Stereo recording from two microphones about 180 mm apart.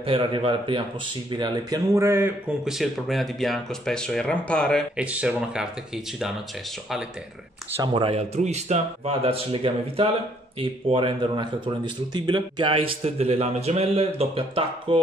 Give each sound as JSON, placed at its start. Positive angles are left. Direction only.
{"t": 0.0, "sound": "speech", "side_deg": -30}
{"t": 2.6, "sound": "speech", "side_deg": 0}
{"t": 4.9, "sound": "speech", "side_deg": -5}
{"t": 7.7, "sound": "speech", "side_deg": -25}